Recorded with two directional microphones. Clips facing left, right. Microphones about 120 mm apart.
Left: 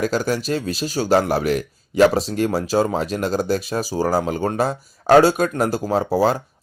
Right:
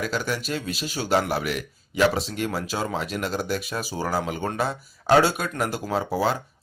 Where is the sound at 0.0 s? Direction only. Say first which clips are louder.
Left 7 dB; 40° left (ahead or behind).